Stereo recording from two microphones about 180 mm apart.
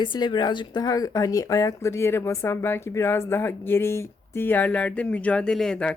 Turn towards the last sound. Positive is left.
turn(degrees=5)  # may be behind; listen again after turning